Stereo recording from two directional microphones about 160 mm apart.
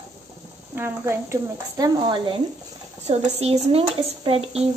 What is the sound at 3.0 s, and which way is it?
Speech, 40° right (ahead or behind).